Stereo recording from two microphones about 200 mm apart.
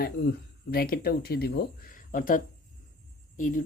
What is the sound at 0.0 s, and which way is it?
Speech, 50° left (ahead or behind).